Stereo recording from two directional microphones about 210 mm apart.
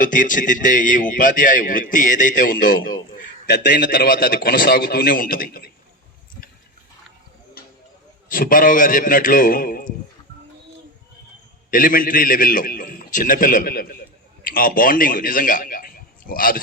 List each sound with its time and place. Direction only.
0.0 s a man's voice: 40° left (ahead or behind)
3.4 s a man's voice: 55° left (ahead or behind)
7.6 s a sound: 45° left (ahead or behind)
8.3 s a man's voice: 40° left (ahead or behind)
11.7 s a man's voice: 40° left (ahead or behind)